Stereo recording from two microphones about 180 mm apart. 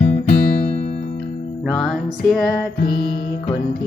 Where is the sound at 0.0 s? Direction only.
40° left (ahead or behind).